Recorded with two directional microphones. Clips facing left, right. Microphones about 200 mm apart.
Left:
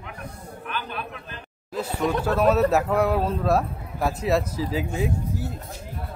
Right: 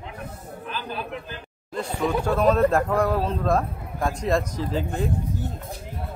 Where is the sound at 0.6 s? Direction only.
35° right (ahead or behind).